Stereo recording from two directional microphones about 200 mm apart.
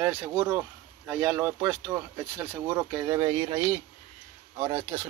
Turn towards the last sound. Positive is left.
turn(degrees=-20)  # may be behind; listen again after turning